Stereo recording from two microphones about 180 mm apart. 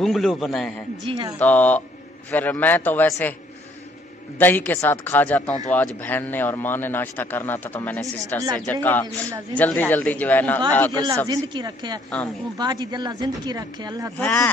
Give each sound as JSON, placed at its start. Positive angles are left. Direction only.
{"t": 0.0, "sound": "a man's voice", "side_deg": 0}
{"t": 1.0, "sound": "speech", "side_deg": -30}
{"t": 1.4, "sound": "speech", "side_deg": 10}
{"t": 4.4, "sound": "speech", "side_deg": 10}
{"t": 11.2, "sound": "speech", "side_deg": -25}
{"t": 14.1, "sound": "a man's voice", "side_deg": 5}